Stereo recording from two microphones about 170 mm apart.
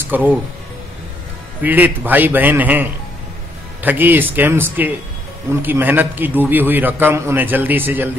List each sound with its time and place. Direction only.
0.1 s a man's voice: 10° right (ahead or behind)
1.6 s a man's voice: 10° right (ahead or behind)